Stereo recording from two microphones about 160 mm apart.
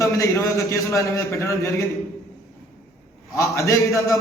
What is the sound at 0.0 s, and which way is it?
A man's voice, 20° left (ahead or behind).